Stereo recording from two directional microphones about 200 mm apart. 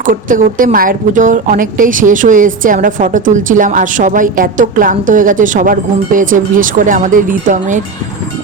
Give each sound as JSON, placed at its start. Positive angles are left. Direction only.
{"t": 0.0, "sound": "a woman's voice", "side_deg": -40}